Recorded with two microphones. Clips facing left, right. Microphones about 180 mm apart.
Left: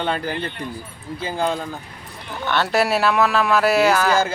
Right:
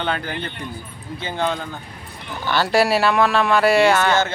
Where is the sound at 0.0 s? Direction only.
Centre (ahead or behind).